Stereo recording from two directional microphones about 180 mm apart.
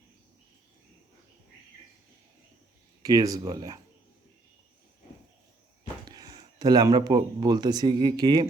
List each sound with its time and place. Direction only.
3.0 s speech: 20° right (ahead or behind)
6.1 s speech: 20° right (ahead or behind)